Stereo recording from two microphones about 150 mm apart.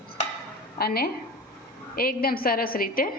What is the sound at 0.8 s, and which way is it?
Speech, 90° left.